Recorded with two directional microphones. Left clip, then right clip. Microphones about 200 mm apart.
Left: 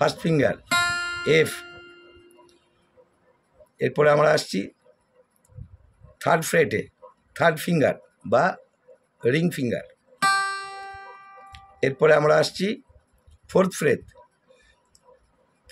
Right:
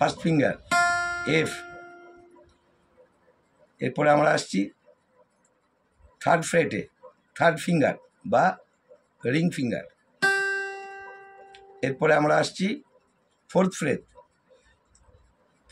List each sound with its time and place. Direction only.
0.0 s guitar: 55° left (ahead or behind)
3.7 s speech: 55° left (ahead or behind)
6.1 s speech: 55° left (ahead or behind)
9.2 s guitar: 55° left (ahead or behind)
11.5 s speech: 55° left (ahead or behind)